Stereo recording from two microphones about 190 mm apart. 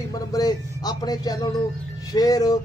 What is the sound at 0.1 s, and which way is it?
Speech, 20° left (ahead or behind).